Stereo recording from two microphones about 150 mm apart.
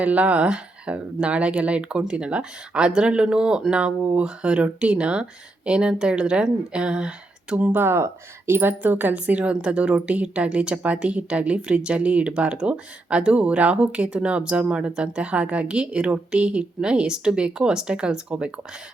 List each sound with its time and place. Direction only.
0.0 s a woman's voice: 10° right (ahead or behind)